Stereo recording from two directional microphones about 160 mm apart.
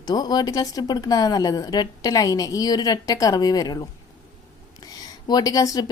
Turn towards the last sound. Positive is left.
turn(degrees=20)  # may be behind; listen again after turning